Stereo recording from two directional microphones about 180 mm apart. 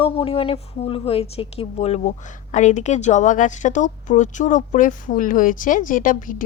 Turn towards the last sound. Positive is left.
turn(degrees=50)  # may be behind; listen again after turning